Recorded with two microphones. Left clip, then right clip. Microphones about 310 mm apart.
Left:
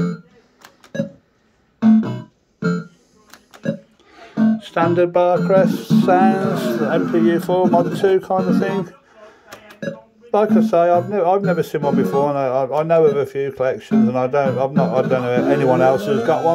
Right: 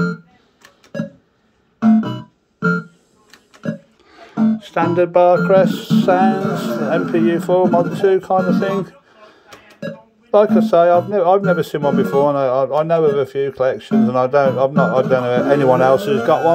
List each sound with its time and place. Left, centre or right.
4.1 s speech: centre
10.3 s speech: centre